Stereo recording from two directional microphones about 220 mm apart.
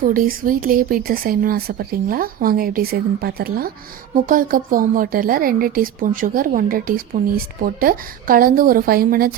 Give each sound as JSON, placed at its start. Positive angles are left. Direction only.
{"t": 0.1, "sound": "speech", "side_deg": -40}